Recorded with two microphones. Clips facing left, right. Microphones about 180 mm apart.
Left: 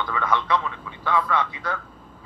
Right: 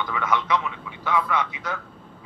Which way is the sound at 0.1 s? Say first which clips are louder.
Left 1 dB; 15° right (ahead or behind).